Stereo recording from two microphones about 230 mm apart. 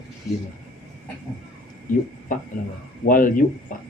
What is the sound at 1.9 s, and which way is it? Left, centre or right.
Speech, left.